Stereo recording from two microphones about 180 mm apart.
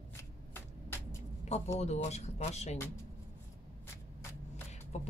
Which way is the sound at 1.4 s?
35° left (ahead or behind).